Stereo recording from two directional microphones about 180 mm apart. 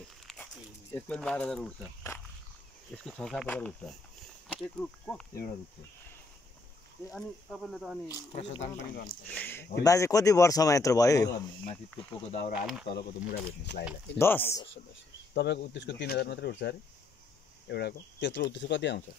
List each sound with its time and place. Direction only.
0.9 s speech: 5° left (ahead or behind)
3.0 s speech: 5° left (ahead or behind)
7.1 s speech: centre (ahead or behind)
8.1 s speech: 30° left (ahead or behind)
8.9 s speech: 55° left (ahead or behind)
9.3 s speech: 10° left (ahead or behind)
12.3 s speech: 40° left (ahead or behind)
12.8 s speech: 65° left (ahead or behind)
14.1 s speech: 10° left (ahead or behind)
15.3 s speech: 75° left (ahead or behind)